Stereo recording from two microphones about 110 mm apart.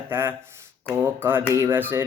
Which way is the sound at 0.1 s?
20° right (ahead or behind).